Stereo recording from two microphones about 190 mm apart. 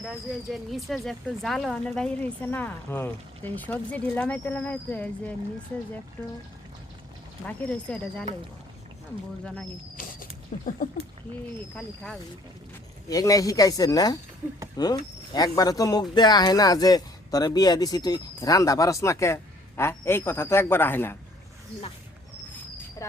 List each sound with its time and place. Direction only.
0.0 s speech: centre (ahead or behind)
7.4 s speech: 5° left (ahead or behind)
10.0 s rodents: 45° left (ahead or behind)
11.7 s speech: 5° left (ahead or behind)
13.1 s speech: 20° left (ahead or behind)